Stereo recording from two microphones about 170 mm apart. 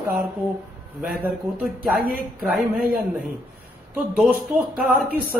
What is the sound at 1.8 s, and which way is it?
Speech, 60° right (ahead or behind).